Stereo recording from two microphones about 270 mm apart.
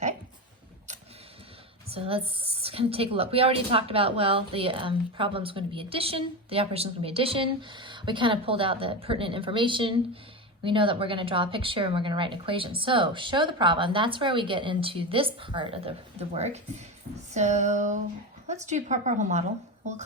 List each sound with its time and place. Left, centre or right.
1.9 s a woman's voice: right